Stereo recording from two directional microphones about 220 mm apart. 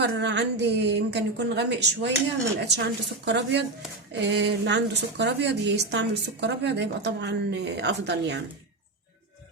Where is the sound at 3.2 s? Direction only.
50° right (ahead or behind).